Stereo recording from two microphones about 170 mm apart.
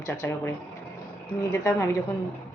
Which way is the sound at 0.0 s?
15° left (ahead or behind).